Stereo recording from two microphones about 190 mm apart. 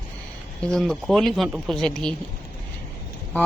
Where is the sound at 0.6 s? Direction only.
5° left (ahead or behind).